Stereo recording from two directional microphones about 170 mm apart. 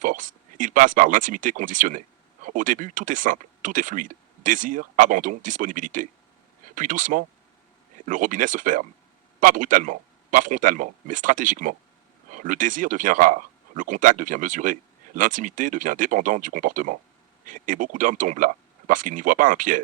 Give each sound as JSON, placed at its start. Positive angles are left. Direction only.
{"t": 0.0, "sound": "speech", "side_deg": -50}